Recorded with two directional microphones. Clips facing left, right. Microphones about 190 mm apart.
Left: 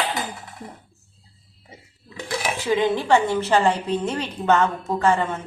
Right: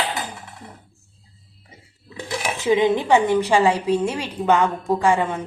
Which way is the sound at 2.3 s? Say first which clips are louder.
Right 3 dB; 20° right (ahead or behind).